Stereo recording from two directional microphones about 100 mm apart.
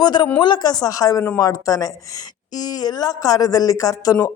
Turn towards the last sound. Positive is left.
turn(degrees=35)  # may be behind; listen again after turning